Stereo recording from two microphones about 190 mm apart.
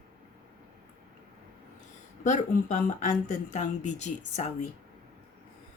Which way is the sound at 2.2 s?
40° left (ahead or behind).